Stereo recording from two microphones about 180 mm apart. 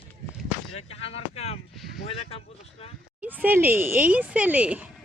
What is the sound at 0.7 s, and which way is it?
Speech, 35° left (ahead or behind).